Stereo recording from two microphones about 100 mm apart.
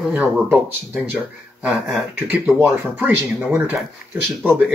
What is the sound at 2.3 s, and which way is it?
Speech, 20° right (ahead or behind).